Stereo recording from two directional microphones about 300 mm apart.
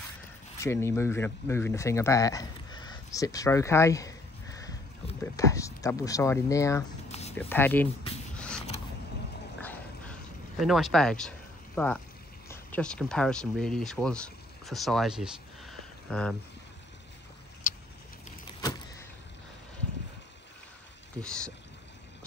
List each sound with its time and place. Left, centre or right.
0.6 s speech: centre
7.1 s a sound: left
7.3 s speech: centre
9.6 s dog: centre
10.6 s speech: centre
17.6 s vehicle: left
18.6 s vehicle: centre
21.2 s speech: centre